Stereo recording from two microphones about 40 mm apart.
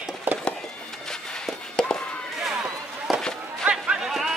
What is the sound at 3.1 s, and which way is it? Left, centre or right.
Run, centre.